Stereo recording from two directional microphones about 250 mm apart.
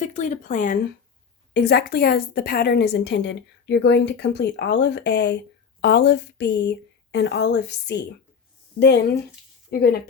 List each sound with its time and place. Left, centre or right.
0.0 s speech: left
1.5 s a woman's voice: left